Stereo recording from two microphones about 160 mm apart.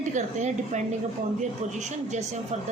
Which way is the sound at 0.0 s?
50° right (ahead or behind).